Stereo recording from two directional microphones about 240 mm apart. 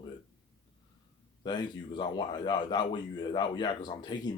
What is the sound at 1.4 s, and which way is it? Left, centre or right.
Speech, centre.